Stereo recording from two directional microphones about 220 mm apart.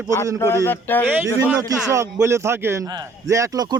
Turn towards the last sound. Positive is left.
turn(degrees=-15)  # may be behind; listen again after turning